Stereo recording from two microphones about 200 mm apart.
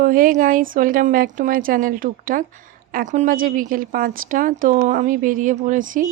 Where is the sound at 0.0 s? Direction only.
45° right (ahead or behind).